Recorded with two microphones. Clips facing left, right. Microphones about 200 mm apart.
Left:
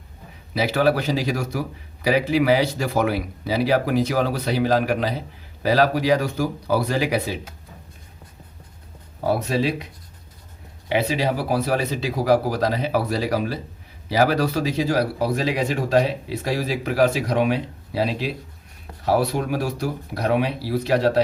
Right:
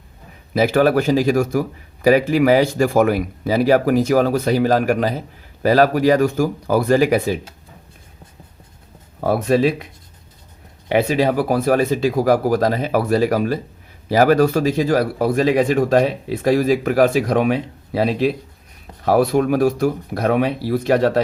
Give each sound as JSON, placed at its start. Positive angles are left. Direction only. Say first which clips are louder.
{"t": 0.5, "sound": "a man's voice", "louder": "right 5 dB", "side_deg": -50}
{"t": 9.2, "sound": "a man's voice", "louder": "right 5 dB", "side_deg": -55}
{"t": 10.8, "sound": "a man's voice", "louder": "right 5 dB", "side_deg": -55}